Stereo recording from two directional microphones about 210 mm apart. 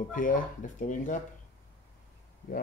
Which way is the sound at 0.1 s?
40° left (ahead or behind).